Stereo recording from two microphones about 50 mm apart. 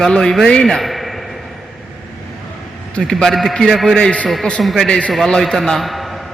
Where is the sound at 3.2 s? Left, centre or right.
Centre.